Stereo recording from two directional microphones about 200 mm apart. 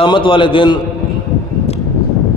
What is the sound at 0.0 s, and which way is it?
Speech, 25° left (ahead or behind).